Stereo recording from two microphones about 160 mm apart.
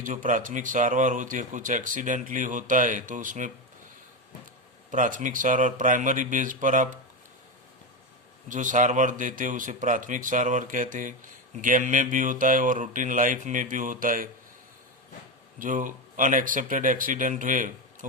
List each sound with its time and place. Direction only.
0.0 s speech: 55° right (ahead or behind)
4.9 s speech: 55° right (ahead or behind)
8.4 s speech: 50° right (ahead or behind)
15.5 s speech: 55° right (ahead or behind)